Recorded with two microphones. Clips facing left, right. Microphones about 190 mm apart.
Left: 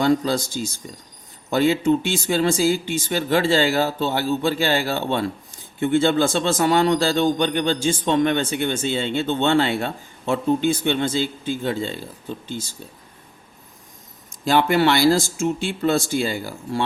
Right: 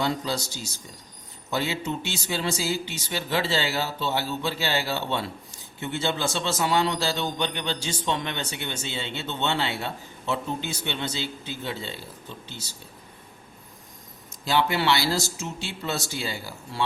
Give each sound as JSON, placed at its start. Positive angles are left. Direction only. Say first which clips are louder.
{"t": 0.0, "sound": "speech", "louder": "left 8 dB", "side_deg": 50}
{"t": 14.4, "sound": "speech", "louder": "left 6 dB", "side_deg": 50}